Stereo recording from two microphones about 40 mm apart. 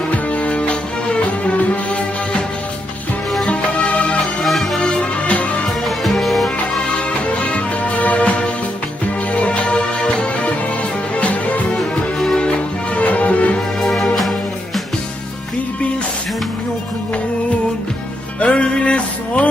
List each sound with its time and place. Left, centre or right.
0.3 s music: left
3.4 s music: left
4.4 s music: centre
5.3 s music: left
6.0 s music: centre
7.3 s music: left
9.3 s music: left
12.9 s music: left
13.8 s music: centre
18.3 s music: left